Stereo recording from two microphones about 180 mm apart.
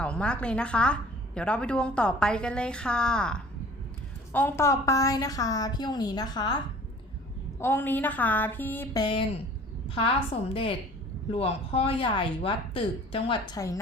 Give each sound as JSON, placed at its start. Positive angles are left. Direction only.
{"t": 0.0, "sound": "a woman's voice", "side_deg": 5}
{"t": 7.6, "sound": "speech", "side_deg": 10}
{"t": 10.5, "sound": "speech", "side_deg": 30}